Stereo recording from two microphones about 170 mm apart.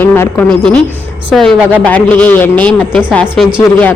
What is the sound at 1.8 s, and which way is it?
Speech, 10° left (ahead or behind).